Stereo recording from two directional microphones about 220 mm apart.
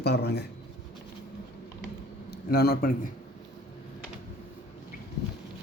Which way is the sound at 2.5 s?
45° left (ahead or behind).